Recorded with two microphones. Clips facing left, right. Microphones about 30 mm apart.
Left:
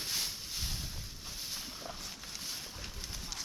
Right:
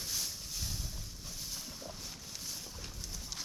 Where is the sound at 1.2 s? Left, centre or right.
Left.